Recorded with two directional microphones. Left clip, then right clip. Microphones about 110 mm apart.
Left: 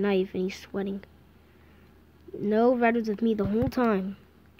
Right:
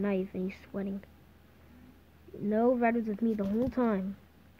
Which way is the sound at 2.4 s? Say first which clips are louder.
Left 5 dB; 35° left (ahead or behind).